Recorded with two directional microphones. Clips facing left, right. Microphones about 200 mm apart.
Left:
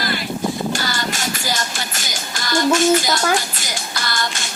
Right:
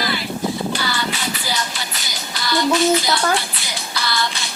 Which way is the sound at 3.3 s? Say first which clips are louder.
Left 1 dB; 45° left (ahead or behind).